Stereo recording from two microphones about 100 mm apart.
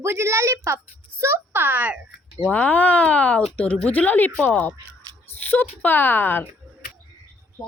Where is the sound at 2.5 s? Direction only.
15° left (ahead or behind).